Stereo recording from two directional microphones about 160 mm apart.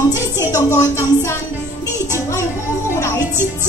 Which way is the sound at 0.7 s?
20° left (ahead or behind).